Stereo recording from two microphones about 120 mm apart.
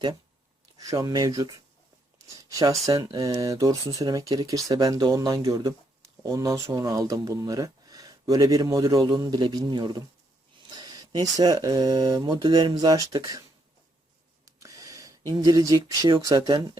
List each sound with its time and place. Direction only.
0.8 s speech: 30° right (ahead or behind)
14.4 s a sound: 25° right (ahead or behind)
15.3 s speech: 30° right (ahead or behind)